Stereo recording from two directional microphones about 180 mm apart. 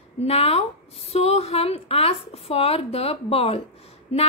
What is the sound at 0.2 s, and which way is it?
A woman's voice, 35° left (ahead or behind).